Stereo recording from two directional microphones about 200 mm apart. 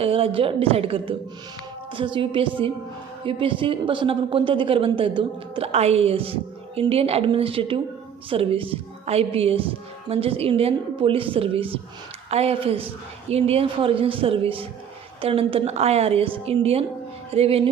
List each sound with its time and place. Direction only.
0.0 s a woman's voice: 30° right (ahead or behind)